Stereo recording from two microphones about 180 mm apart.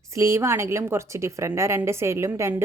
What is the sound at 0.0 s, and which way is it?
A woman's voice, 15° right (ahead or behind).